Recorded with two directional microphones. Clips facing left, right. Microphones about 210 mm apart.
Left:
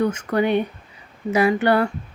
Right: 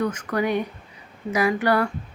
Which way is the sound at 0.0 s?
25° left (ahead or behind).